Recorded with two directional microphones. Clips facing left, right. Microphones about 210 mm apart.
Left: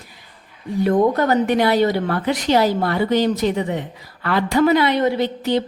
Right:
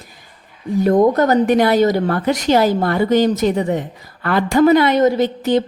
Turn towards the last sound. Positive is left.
turn(degrees=-45)  # may be behind; listen again after turning